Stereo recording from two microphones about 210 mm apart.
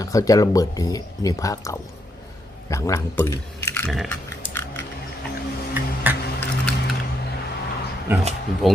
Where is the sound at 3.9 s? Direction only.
Centre (ahead or behind).